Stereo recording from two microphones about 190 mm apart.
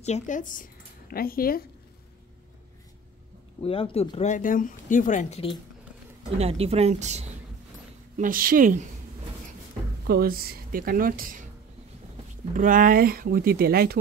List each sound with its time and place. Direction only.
0.0 s speech: 40° left (ahead or behind)
3.6 s speech: 30° left (ahead or behind)
6.3 s speech: 35° right (ahead or behind)
8.2 s speech: 50° right (ahead or behind)
10.0 s speech: 50° right (ahead or behind)
12.5 s speech: 45° right (ahead or behind)